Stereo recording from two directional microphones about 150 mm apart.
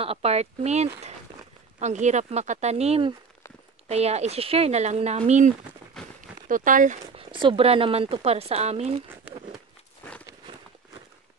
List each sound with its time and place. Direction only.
0.0 s speech: 40° right (ahead or behind)
6.5 s speech: 60° right (ahead or behind)
7.2 s speech: 35° right (ahead or behind)